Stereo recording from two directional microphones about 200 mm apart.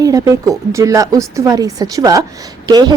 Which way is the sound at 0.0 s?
15° right (ahead or behind).